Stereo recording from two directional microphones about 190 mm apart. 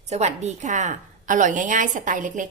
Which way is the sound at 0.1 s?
35° right (ahead or behind).